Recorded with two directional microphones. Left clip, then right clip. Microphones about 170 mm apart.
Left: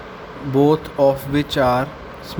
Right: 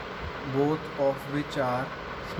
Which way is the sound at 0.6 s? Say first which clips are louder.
Left 11 dB; 75° left (ahead or behind).